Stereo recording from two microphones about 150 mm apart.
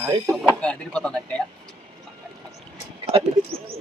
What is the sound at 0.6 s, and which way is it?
Speech, 5° left (ahead or behind).